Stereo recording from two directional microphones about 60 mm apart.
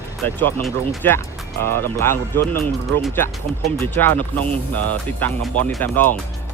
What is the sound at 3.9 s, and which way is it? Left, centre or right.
Speech, left.